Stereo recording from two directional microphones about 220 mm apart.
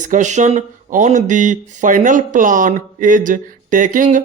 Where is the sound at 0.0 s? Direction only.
35° right (ahead or behind).